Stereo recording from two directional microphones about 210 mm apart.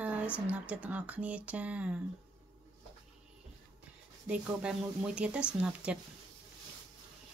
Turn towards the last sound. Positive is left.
turn(degrees=-5)  # may be behind; listen again after turning